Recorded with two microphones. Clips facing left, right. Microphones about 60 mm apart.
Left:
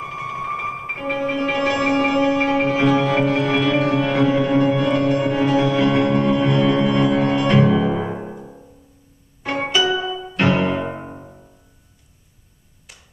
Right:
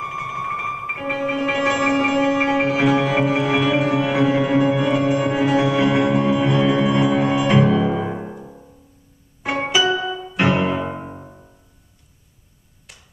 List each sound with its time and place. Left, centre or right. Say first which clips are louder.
0.0 s music: right 1 dB; centre
7.7 s piano: even; centre
9.4 s music: right 1 dB; centre